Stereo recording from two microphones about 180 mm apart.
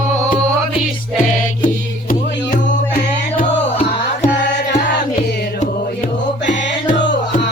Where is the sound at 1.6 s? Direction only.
50° left (ahead or behind).